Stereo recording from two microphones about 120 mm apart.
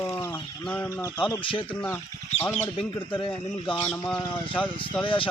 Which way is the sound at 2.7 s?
45° left (ahead or behind).